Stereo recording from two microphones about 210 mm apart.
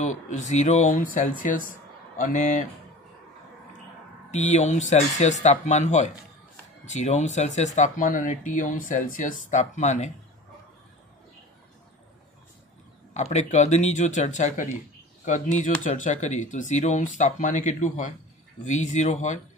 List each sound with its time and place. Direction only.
0.0 s speech: 35° left (ahead or behind)
4.3 s speech: 35° left (ahead or behind)
13.1 s speech: 30° left (ahead or behind)